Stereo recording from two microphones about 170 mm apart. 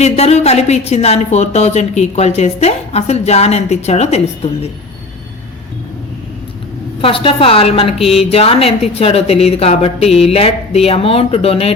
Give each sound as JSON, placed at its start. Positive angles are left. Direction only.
{"t": 0.0, "sound": "a woman's voice", "side_deg": 40}
{"t": 7.0, "sound": "a woman's voice", "side_deg": 35}